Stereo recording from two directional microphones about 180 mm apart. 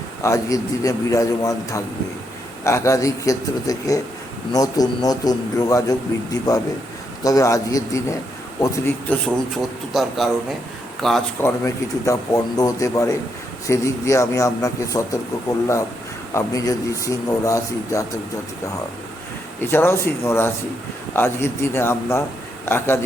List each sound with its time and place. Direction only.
0.2 s a man's voice: 15° left (ahead or behind)
9.2 s a man's voice: centre (ahead or behind)
11.4 s a man's voice: 20° left (ahead or behind)
16.3 s a man's voice: 20° left (ahead or behind)
19.6 s a man's voice: 15° left (ahead or behind)